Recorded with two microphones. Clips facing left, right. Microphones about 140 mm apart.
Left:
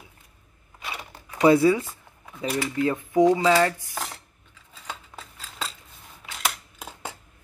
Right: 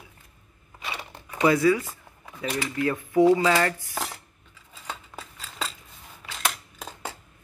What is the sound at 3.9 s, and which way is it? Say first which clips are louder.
Dishes: right 1 dB; 15° right (ahead or behind).